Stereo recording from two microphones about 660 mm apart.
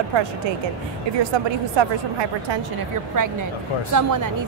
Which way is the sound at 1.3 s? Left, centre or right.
Right.